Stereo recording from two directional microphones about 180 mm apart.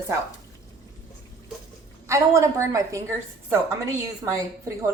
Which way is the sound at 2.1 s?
15° right (ahead or behind).